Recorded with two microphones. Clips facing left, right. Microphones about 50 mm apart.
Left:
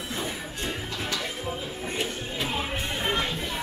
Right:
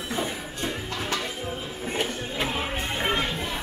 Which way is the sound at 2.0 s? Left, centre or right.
Right.